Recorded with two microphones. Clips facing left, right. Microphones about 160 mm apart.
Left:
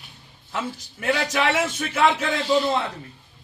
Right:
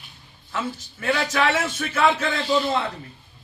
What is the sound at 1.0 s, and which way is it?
Speech, 15° left (ahead or behind).